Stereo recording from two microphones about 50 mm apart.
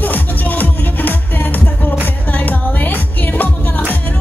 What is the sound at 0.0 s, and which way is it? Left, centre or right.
Music, left.